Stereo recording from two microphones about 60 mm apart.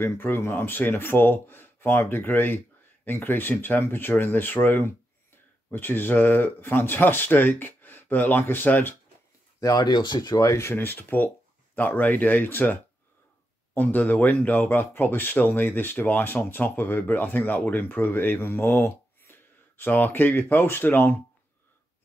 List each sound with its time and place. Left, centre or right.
0.0 s speech: left
10.3 s speech: left
10.6 s speech: left
13.7 s speech: left